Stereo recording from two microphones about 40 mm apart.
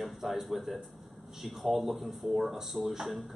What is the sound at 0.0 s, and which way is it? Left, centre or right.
A man's voice, centre.